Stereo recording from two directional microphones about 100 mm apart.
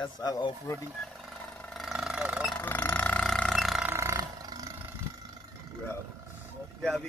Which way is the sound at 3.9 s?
30° right (ahead or behind).